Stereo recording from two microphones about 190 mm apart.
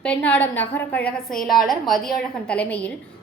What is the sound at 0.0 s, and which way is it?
A woman's voice, 10° left (ahead or behind).